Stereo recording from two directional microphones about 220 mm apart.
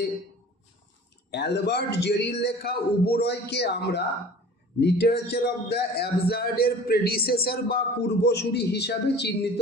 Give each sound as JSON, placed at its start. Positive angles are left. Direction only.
{"t": 1.3, "sound": "a man's voice", "side_deg": 50}